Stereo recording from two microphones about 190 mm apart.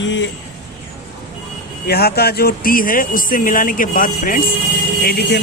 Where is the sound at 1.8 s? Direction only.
55° left (ahead or behind).